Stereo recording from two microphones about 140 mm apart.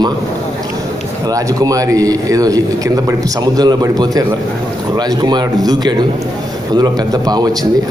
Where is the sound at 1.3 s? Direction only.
25° right (ahead or behind).